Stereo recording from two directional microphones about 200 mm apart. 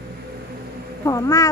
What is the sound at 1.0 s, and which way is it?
Speech, 15° left (ahead or behind).